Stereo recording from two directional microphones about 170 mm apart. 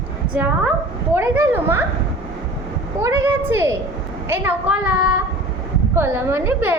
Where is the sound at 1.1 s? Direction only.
10° right (ahead or behind).